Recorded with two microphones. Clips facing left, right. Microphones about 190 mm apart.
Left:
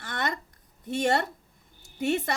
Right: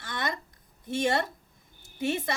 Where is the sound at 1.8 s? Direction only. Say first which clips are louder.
Left 2 dB; 65° left (ahead or behind).